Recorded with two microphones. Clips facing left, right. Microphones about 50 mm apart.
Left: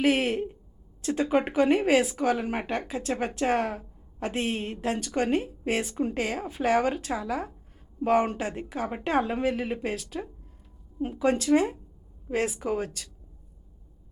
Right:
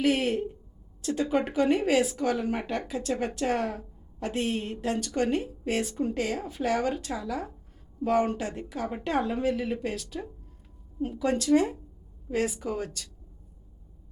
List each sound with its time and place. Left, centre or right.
0.0 s a woman's voice: left